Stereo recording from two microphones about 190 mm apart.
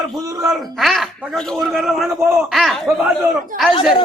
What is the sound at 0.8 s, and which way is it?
A man's voice, centre (ahead or behind).